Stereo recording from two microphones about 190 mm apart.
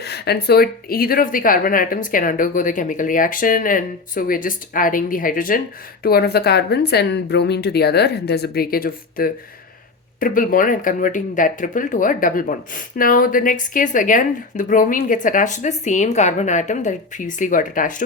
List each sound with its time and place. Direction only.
0.0 s speech: 60° left (ahead or behind)